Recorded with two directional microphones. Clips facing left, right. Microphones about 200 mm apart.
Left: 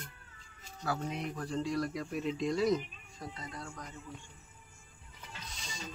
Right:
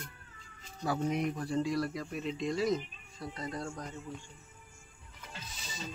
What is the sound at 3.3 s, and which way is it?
Speech, 45° right (ahead or behind).